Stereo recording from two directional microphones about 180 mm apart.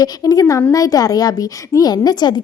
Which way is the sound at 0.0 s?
20° left (ahead or behind).